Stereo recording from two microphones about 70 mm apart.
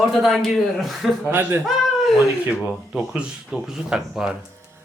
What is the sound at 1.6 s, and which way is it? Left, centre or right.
Speech, centre.